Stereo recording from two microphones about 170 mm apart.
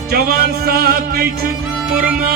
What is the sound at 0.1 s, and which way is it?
Music, 65° right (ahead or behind).